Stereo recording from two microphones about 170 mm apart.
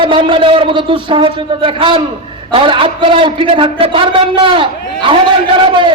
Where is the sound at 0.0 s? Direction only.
30° right (ahead or behind).